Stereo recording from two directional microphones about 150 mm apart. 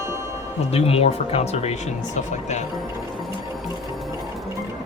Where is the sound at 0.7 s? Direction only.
40° left (ahead or behind).